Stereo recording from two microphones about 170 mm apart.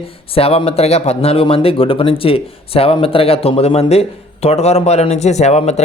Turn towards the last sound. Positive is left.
turn(degrees=40)  # may be behind; listen again after turning